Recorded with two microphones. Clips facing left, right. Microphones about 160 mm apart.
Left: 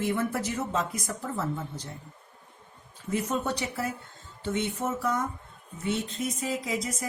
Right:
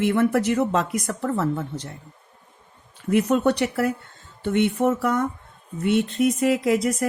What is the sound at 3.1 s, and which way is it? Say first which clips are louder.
Speech: right 10 dB; 70° right (ahead or behind).